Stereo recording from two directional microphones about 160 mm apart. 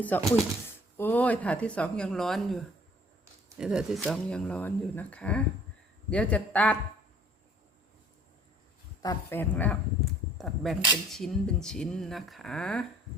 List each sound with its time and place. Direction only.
0.0 s speech: 10° left (ahead or behind)
9.0 s speech: 25° left (ahead or behind)
9.4 s speech: 10° left (ahead or behind)